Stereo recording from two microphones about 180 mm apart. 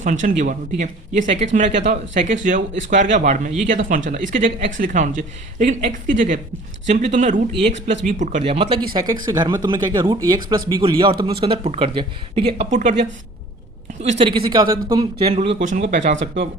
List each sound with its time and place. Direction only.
0.0 s speech: 45° right (ahead or behind)
14.0 s speech: 35° right (ahead or behind)
15.3 s speech: 40° right (ahead or behind)